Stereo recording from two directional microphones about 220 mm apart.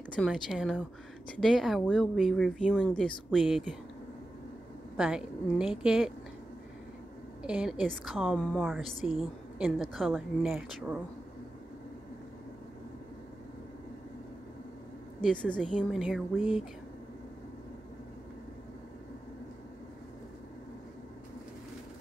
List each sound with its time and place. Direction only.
0.1 s a woman's voice: 5° left (ahead or behind)
4.9 s a woman's voice: 5° right (ahead or behind)
7.4 s a woman's voice: 5° right (ahead or behind)
15.2 s a woman's voice: 5° left (ahead or behind)